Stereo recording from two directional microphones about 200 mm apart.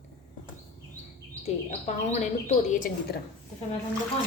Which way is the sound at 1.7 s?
35° left (ahead or behind).